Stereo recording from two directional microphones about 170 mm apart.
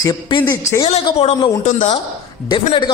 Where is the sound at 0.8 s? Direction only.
40° left (ahead or behind).